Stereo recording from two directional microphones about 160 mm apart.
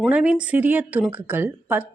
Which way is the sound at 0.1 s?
5° right (ahead or behind).